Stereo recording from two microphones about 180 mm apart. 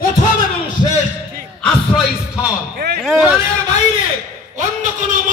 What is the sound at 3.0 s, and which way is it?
Speech, centre (ahead or behind).